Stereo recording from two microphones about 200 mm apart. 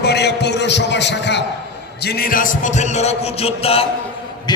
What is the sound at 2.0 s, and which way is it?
A man's voice, 50° left (ahead or behind).